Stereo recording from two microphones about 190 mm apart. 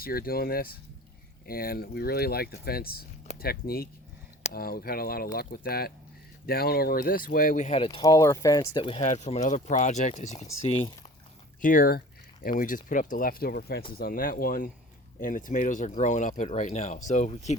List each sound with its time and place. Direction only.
0.0 s speech: 50° left (ahead or behind)
7.9 s speech: 20° left (ahead or behind)
9.0 s speech: 35° left (ahead or behind)
11.6 s speech: 45° left (ahead or behind)